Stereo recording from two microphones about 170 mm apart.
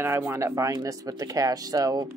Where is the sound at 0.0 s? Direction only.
15° right (ahead or behind).